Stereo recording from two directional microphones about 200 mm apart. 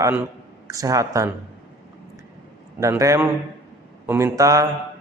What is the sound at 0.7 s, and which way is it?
Speech, 15° right (ahead or behind).